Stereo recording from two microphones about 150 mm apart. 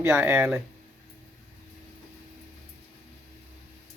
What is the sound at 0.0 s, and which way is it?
Speech, 15° right (ahead or behind).